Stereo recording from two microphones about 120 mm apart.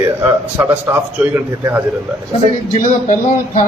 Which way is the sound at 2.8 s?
90° left.